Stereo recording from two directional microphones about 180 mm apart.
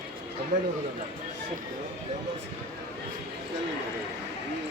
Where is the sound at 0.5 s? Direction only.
45° right (ahead or behind).